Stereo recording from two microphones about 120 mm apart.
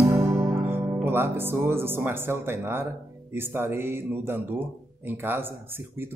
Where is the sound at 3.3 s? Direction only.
20° right (ahead or behind).